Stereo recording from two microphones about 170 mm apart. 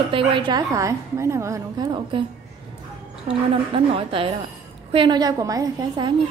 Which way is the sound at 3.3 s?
35° right (ahead or behind).